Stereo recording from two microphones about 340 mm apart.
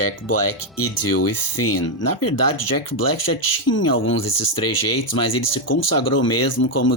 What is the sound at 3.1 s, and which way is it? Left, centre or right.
Speech, left.